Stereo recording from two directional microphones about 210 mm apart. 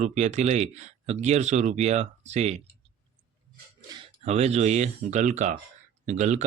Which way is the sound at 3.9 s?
25° right (ahead or behind).